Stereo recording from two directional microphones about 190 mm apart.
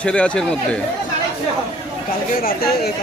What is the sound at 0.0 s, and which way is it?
Speech, 5° left (ahead or behind).